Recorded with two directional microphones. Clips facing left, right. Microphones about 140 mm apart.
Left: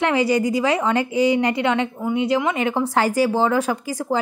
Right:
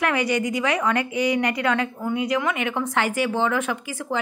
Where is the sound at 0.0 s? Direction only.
30° left (ahead or behind).